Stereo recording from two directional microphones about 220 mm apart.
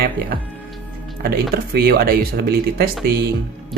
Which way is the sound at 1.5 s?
45° right (ahead or behind).